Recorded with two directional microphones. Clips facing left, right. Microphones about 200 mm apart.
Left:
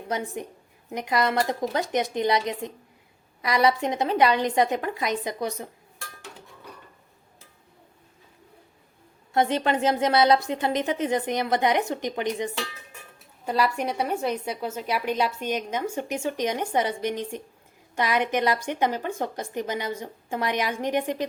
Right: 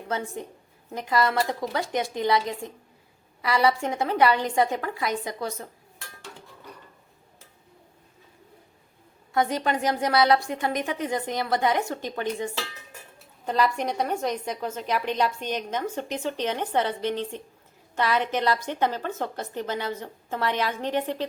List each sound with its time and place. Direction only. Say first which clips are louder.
0.1 s a woman's voice: left 1 dB; 15° left (ahead or behind)
9.3 s a woman's voice: left 2 dB; 25° left (ahead or behind)